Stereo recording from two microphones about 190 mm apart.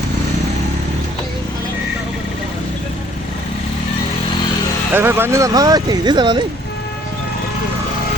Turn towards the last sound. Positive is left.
turn(degrees=-25)  # may be behind; listen again after turning